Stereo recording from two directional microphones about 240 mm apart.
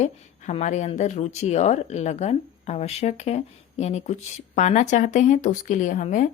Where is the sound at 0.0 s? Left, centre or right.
Left.